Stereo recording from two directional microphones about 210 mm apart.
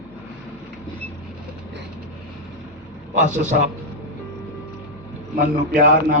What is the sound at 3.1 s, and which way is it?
Speech, 35° right (ahead or behind).